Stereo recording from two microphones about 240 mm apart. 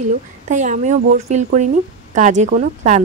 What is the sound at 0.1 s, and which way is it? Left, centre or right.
A woman's voice, right.